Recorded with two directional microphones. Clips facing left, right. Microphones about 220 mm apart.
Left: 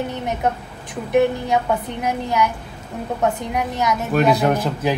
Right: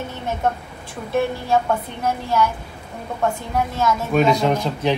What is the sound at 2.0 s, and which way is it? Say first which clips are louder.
A woman's voice: right 1 dB; 15° left (ahead or behind).